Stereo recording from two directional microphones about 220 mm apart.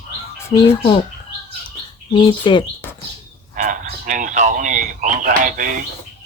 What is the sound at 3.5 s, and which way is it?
Speech, 35° right (ahead or behind).